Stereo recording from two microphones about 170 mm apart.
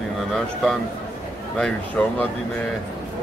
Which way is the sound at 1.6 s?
5° left (ahead or behind).